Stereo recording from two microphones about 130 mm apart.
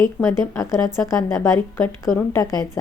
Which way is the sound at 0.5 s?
20° left (ahead or behind).